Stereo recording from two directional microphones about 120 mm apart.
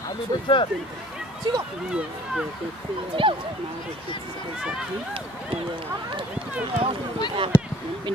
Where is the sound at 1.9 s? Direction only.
5° right (ahead or behind).